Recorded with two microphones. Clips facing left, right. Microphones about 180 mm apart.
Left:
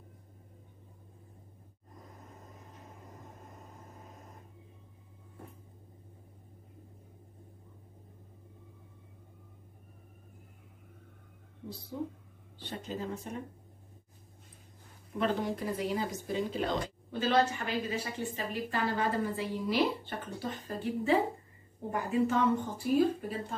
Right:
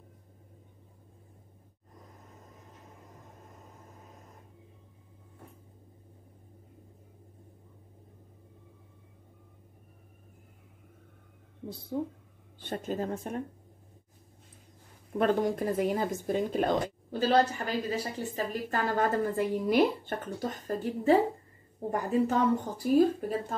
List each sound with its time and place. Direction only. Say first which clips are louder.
11.9 s a woman's voice: right 5 dB; 45° right (ahead or behind)
15.1 s a woman's voice: right 5 dB; 50° right (ahead or behind)
17.1 s a woman's voice: right 3 dB; 35° right (ahead or behind)